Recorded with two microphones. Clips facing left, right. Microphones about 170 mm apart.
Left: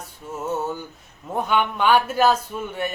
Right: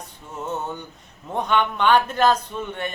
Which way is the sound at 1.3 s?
5° left (ahead or behind).